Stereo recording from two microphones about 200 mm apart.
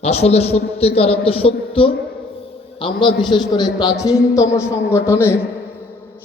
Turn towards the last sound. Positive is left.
turn(degrees=10)  # may be behind; listen again after turning